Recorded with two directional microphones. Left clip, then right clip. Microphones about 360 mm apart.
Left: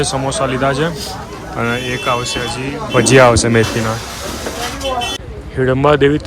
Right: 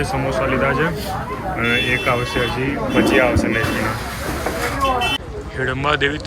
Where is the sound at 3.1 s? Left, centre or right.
Left.